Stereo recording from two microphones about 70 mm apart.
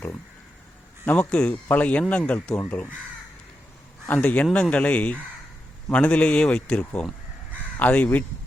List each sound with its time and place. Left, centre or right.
1.0 s speech: left
1.3 s a man's voice: centre
1.6 s speech: left
4.1 s a man's voice: left